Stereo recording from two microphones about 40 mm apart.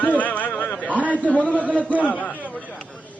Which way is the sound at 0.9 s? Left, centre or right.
Right.